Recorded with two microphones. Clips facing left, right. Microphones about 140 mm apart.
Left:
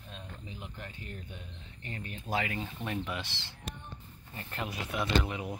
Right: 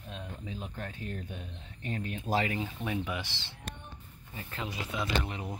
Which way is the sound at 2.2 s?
30° right (ahead or behind).